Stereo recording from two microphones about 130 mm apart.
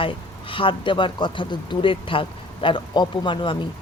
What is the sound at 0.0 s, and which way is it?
Speech, 40° left (ahead or behind).